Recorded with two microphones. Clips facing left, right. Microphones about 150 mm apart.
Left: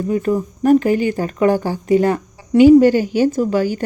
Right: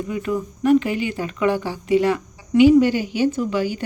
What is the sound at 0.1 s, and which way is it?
Speech, 40° left (ahead or behind).